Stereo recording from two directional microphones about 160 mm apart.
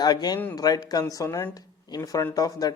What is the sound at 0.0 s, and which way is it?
A man's voice, 25° left (ahead or behind).